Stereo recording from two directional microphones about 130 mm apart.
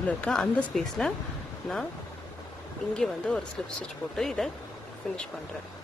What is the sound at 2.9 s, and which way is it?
Speech, 5° left (ahead or behind).